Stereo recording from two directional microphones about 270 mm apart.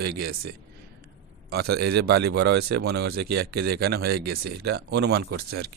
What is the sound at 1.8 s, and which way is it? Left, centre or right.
Speech, right.